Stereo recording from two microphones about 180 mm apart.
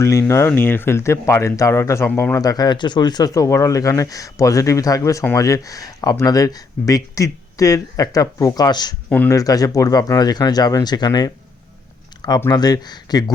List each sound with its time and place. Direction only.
0.0 s speech: 15° left (ahead or behind)
9.0 s speech: 10° left (ahead or behind)
12.4 s speech: 20° left (ahead or behind)